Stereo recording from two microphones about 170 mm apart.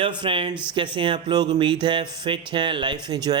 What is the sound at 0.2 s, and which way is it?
A man's voice, 30° right (ahead or behind).